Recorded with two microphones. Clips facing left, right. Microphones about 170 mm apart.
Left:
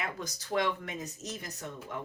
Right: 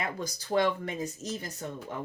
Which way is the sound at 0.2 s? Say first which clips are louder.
Right 5 dB; 35° right (ahead or behind).